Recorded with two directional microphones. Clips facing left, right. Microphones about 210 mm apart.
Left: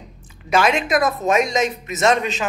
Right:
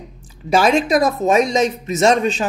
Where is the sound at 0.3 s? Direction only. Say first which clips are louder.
Right 3 dB; 35° right (ahead or behind).